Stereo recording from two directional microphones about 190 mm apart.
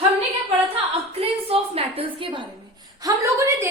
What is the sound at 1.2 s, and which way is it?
Speech, 30° right (ahead or behind).